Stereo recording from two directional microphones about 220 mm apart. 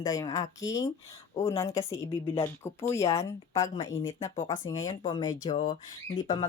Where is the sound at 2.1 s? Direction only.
25° left (ahead or behind).